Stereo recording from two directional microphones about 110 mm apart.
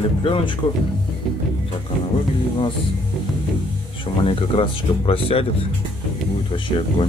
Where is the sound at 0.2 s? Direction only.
50° left (ahead or behind).